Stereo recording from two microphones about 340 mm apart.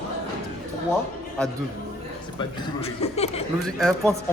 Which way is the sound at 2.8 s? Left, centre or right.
Centre.